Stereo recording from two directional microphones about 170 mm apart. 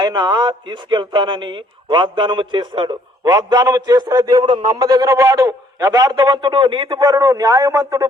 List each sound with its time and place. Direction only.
0.0 s speech: 25° right (ahead or behind)